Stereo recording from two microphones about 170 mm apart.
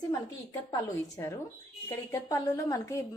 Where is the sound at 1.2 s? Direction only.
20° left (ahead or behind).